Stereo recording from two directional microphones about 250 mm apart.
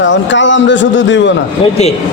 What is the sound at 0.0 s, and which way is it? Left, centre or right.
Speech, left.